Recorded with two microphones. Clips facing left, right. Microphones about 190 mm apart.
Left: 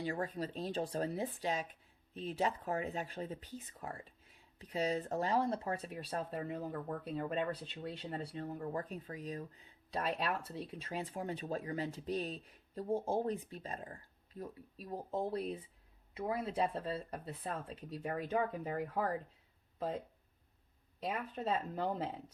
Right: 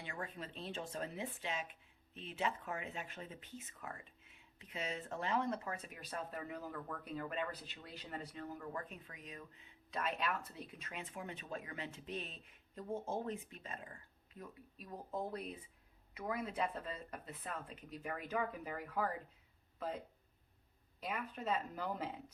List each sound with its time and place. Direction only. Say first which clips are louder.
0.0 s speech: left 9 dB; 35° left (ahead or behind)
21.0 s speech: left 4 dB; 30° left (ahead or behind)